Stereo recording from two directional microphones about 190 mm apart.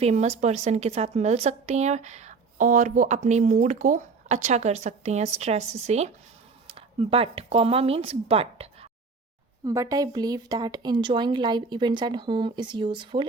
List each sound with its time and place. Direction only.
0.0 s a woman's voice: 35° right (ahead or behind)
9.6 s a woman's voice: 15° right (ahead or behind)